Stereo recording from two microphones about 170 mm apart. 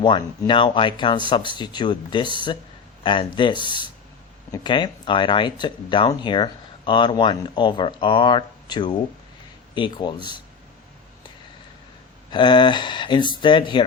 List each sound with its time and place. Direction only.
0.0 s speech: 25° left (ahead or behind)
12.3 s speech: 25° left (ahead or behind)